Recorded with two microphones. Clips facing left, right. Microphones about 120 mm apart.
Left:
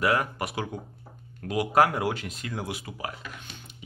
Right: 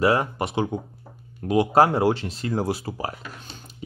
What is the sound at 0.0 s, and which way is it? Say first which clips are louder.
Speech: right 5 dB; 30° right (ahead or behind).